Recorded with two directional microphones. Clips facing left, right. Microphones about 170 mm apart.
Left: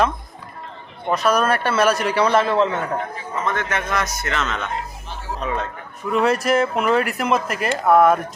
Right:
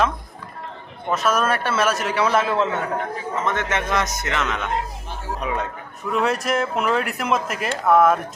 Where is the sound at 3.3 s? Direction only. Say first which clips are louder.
Left 1 dB; 20° right (ahead or behind).